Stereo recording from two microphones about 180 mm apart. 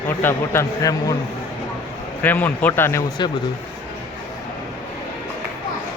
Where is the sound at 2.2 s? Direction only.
10° left (ahead or behind).